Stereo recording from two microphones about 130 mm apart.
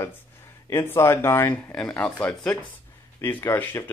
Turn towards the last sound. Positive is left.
turn(degrees=15)  # may be behind; listen again after turning